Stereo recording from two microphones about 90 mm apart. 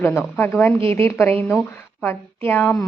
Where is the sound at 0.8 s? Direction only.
90° right.